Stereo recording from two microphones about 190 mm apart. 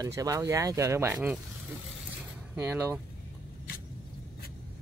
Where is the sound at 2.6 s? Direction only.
10° right (ahead or behind).